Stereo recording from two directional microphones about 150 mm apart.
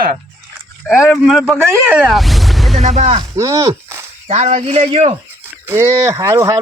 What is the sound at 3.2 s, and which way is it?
Speech, 25° right (ahead or behind).